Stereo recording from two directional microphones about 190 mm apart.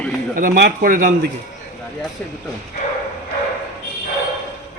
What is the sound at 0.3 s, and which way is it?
Speech, 45° right (ahead or behind).